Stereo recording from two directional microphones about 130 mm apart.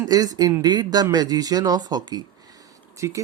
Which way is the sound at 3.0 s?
25° right (ahead or behind).